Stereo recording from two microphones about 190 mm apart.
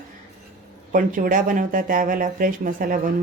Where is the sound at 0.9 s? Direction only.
45° right (ahead or behind).